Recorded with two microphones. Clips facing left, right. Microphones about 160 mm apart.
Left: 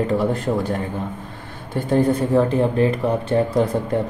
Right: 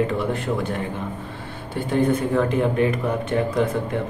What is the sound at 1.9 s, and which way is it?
Speech, 35° left (ahead or behind).